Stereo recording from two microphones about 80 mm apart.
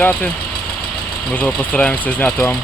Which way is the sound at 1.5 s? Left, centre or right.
Centre.